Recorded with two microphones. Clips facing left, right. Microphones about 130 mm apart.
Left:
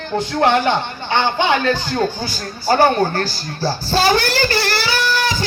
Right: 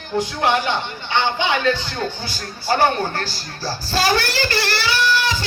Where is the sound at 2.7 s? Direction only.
35° left (ahead or behind).